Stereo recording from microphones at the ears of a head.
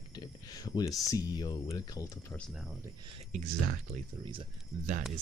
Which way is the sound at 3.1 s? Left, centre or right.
Right.